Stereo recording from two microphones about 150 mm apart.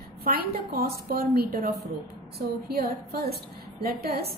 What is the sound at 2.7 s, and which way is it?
A woman's voice, 90° right.